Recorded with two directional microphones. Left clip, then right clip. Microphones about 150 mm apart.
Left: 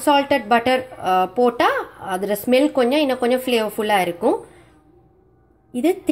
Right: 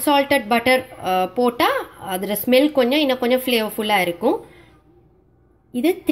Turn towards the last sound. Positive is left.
turn(degrees=0)  # may be behind; listen again after turning